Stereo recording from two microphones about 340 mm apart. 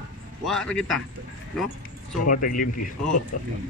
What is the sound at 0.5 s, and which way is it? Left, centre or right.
Speech, centre.